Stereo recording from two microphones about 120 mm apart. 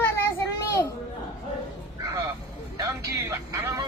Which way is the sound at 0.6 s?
25° left (ahead or behind).